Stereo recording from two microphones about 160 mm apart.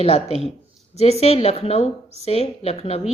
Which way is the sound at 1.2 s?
40° left (ahead or behind).